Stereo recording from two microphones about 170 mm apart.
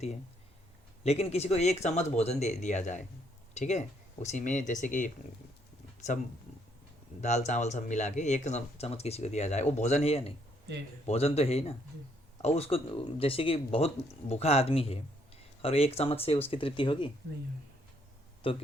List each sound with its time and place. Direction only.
1.0 s speech: 40° left (ahead or behind)
18.4 s speech: 30° left (ahead or behind)